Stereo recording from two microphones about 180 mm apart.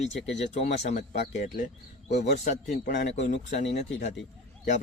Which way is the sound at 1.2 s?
70° left (ahead or behind).